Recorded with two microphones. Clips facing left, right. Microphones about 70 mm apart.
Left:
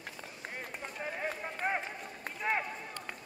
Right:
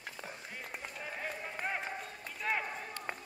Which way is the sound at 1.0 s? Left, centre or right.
Left.